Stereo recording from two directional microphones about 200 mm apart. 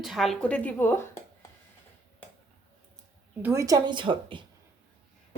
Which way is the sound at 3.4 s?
15° right (ahead or behind).